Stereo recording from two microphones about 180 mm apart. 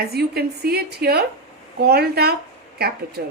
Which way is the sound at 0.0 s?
60° right (ahead or behind).